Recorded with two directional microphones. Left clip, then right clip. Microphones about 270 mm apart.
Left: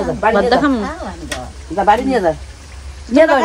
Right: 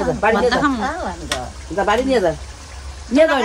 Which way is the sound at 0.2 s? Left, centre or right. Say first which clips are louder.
Left 4 dB; centre.